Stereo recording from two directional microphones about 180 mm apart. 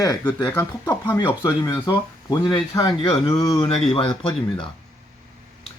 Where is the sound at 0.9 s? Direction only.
20° left (ahead or behind).